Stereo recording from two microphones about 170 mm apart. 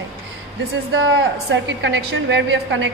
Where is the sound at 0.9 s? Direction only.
90° right.